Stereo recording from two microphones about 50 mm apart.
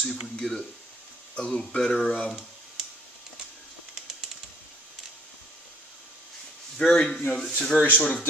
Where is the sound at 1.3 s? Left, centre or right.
Centre.